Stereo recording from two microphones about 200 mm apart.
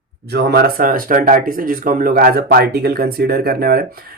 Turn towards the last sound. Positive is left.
turn(degrees=-50)  # may be behind; listen again after turning